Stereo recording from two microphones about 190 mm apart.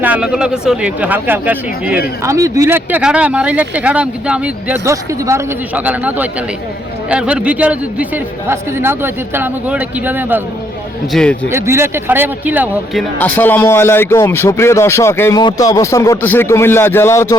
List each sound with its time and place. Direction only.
0.0 s speech: 5° right (ahead or behind)
11.1 s speech: 5° left (ahead or behind)
11.5 s speech: 15° right (ahead or behind); by 17.3 s 15° left (ahead or behind)